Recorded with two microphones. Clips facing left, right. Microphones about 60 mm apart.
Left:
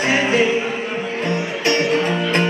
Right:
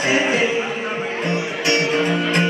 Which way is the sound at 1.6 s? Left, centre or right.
Left.